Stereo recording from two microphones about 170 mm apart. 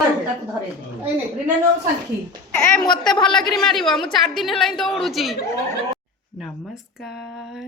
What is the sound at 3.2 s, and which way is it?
Speech, 5° left (ahead or behind).